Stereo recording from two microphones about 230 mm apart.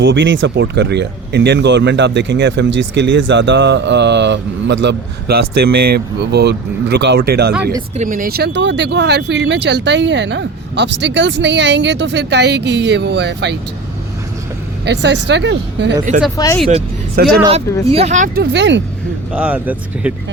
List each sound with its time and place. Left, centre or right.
0.0 s speech: right
7.5 s speech: centre
7.9 s speech: right
14.8 s speech: right
16.4 s speech: centre
17.2 s speech: right
17.9 s speech: right
18.5 s speech: right
19.3 s speech: centre